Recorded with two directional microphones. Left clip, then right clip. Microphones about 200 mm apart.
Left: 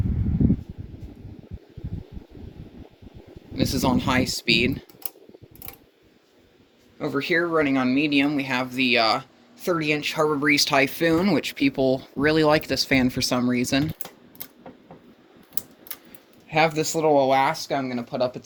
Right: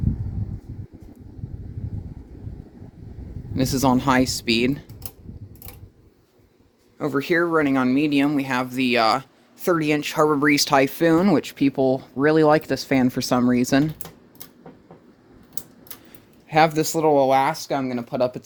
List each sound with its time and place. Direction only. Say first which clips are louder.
3.7 s speech: right 4 dB; 40° right (ahead or behind)
7.0 s speech: right 2 dB; 35° right (ahead or behind)
10.8 s speech: right 3 dB; 25° right (ahead or behind)
16.5 s speech: right 3 dB; 40° right (ahead or behind)